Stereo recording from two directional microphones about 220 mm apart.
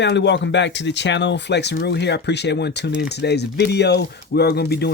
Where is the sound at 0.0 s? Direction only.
50° left (ahead or behind).